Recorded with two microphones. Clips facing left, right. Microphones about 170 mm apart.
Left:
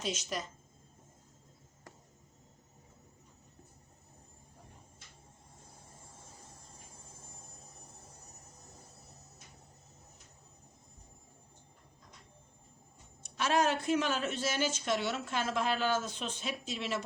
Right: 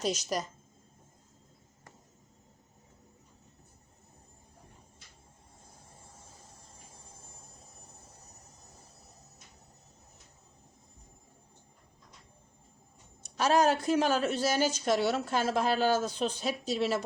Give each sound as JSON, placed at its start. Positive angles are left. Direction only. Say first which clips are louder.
{"t": 0.0, "sound": "a woman's voice", "louder": "right 5 dB", "side_deg": -40}
{"t": 13.2, "sound": "a woman's voice", "louder": "right 5 dB", "side_deg": -40}